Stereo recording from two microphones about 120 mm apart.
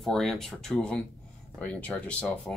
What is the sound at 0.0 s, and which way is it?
Speech, 5° left (ahead or behind).